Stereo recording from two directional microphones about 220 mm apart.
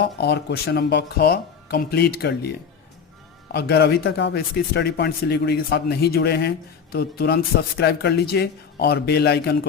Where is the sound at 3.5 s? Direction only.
45° left (ahead or behind).